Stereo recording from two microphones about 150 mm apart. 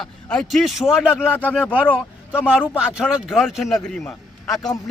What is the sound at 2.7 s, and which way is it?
A man's voice, 5° right (ahead or behind).